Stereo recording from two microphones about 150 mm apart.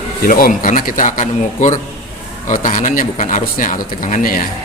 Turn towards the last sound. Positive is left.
turn(degrees=60)  # may be behind; listen again after turning